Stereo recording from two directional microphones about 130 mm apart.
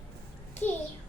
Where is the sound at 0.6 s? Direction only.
15° left (ahead or behind).